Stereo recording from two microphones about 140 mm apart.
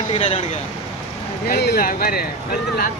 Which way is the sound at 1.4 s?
90° left.